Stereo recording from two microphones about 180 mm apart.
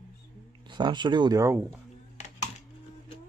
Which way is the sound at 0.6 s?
25° right (ahead or behind).